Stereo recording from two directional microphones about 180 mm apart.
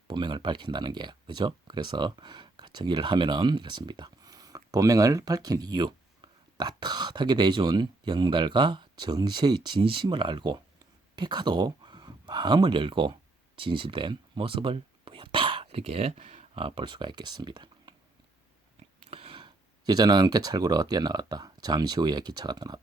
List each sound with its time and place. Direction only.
0.1 s speech: 25° right (ahead or behind)
19.0 s speech: 30° right (ahead or behind)